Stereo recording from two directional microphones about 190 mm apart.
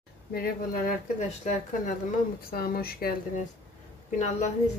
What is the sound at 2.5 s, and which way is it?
Speech, 50° left (ahead or behind).